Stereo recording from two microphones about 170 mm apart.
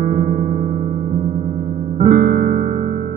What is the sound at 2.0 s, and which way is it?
Music, 55° right (ahead or behind).